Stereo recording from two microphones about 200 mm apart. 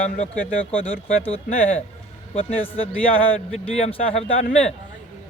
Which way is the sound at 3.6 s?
30° left (ahead or behind).